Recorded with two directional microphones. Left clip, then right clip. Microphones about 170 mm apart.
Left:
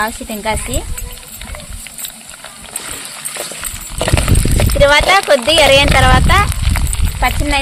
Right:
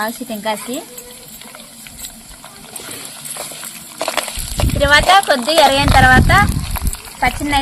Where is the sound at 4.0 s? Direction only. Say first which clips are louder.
Left 3 dB; 30° left (ahead or behind).